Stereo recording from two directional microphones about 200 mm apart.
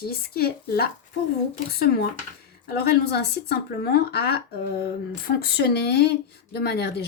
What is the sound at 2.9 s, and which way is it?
Speech, 50° left (ahead or behind).